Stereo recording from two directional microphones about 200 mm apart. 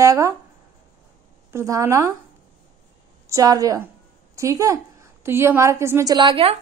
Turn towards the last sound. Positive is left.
turn(degrees=-25)  # may be behind; listen again after turning